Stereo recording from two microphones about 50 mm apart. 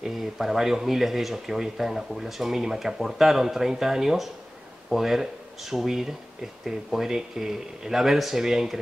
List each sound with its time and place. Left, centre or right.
0.0 s speech: centre